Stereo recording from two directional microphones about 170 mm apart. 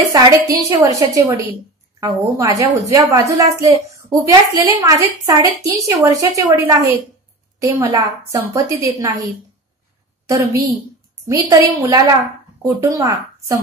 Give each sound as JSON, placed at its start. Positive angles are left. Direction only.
{"t": 0.1, "sound": "a woman's voice", "side_deg": -20}
{"t": 11.2, "sound": "a woman's voice", "side_deg": -20}